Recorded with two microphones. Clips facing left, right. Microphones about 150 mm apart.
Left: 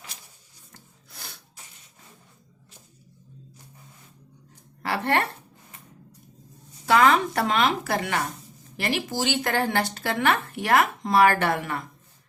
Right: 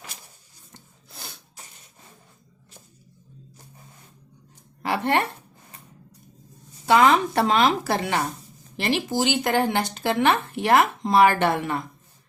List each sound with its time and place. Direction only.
4.8 s speech: 20° right (ahead or behind)
6.8 s speech: 20° right (ahead or behind)
7.4 s a woman's voice: 30° right (ahead or behind)